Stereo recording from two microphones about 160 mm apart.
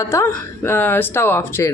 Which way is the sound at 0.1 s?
15° left (ahead or behind).